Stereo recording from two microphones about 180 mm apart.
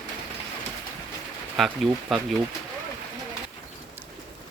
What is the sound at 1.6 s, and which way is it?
Speech, centre (ahead or behind).